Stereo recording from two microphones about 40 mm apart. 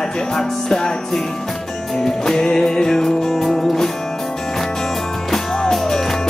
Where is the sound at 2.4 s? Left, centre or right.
Centre.